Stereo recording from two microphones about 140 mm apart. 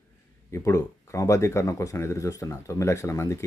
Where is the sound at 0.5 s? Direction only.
20° left (ahead or behind).